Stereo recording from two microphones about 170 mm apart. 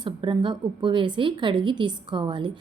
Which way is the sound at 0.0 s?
30° right (ahead or behind).